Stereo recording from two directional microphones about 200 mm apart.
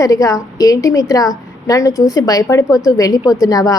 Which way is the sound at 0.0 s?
15° left (ahead or behind).